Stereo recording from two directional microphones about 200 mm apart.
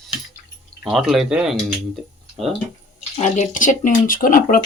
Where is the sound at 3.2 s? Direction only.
40° left (ahead or behind).